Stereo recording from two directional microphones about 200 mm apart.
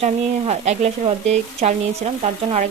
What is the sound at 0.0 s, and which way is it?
Speech, 35° right (ahead or behind).